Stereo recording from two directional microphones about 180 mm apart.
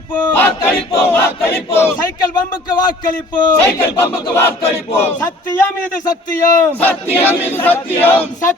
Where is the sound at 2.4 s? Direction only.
50° left (ahead or behind).